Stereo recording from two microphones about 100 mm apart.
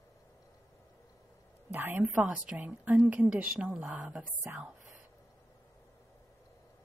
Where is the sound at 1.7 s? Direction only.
20° right (ahead or behind).